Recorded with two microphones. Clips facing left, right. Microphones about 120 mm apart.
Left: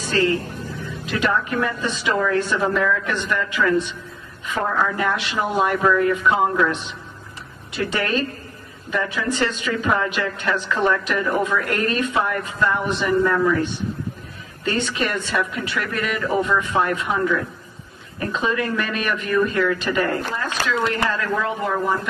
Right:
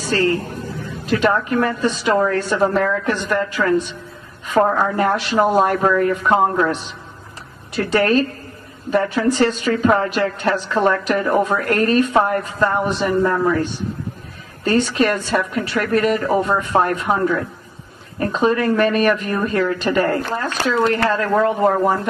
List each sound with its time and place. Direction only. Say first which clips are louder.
1.0 s speech: right 5 dB; 45° right (ahead or behind)